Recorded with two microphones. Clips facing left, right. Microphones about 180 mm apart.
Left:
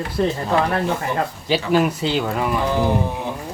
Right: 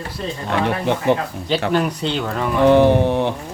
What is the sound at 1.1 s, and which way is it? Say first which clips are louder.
Mantra: right 6 dB; 70° right (ahead or behind).